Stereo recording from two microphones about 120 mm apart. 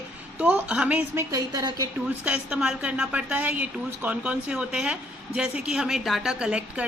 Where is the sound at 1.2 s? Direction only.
30° right (ahead or behind).